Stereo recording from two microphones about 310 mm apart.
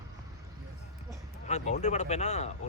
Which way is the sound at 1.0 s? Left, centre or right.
Left.